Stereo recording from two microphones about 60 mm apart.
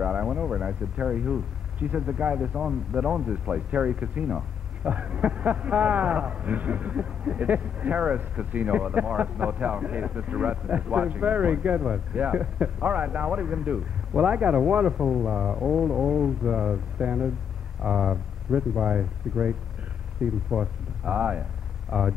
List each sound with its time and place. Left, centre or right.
0.0 s a sound: centre
2.0 s speech: right
20.4 s speech: centre